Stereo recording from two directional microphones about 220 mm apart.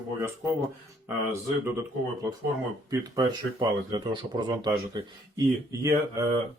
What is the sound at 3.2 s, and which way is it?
Speech, 20° right (ahead or behind).